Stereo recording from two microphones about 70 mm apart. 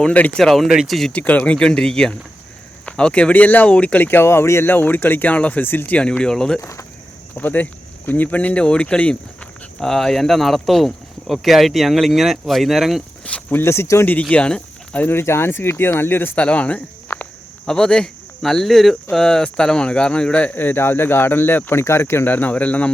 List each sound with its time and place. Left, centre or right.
0.1 s speech: left
0.3 s speech: centre
1.1 s speech: centre; by 4.7 s left
4.7 s speech: left; by 6.6 s centre
6.6 s speech: left
7.3 s speech: left; by 13.0 s centre
13.2 s a sound: centre
13.6 s speech: left
14.1 s speech: centre
15.0 s speech: left
16.4 s speech: centre
17.7 s speech: centre